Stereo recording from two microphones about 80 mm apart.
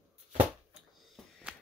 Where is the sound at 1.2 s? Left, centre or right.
Centre.